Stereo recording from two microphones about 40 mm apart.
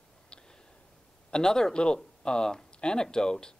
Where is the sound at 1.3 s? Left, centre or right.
Centre.